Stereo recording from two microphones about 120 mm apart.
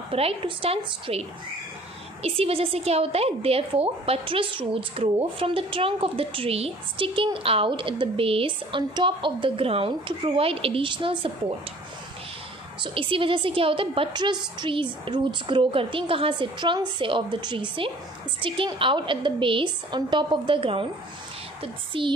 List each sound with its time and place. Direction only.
0.1 s a woman's voice: 55° right (ahead or behind)
2.2 s a woman's voice: 55° right (ahead or behind)
12.8 s a woman's voice: 45° right (ahead or behind)